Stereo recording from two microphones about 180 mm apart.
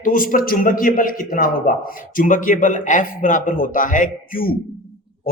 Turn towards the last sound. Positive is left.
turn(degrees=50)  # may be behind; listen again after turning